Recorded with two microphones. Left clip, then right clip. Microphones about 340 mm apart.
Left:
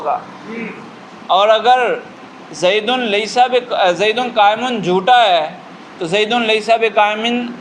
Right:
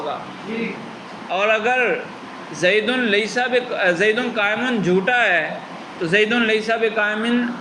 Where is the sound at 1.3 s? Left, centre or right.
Left.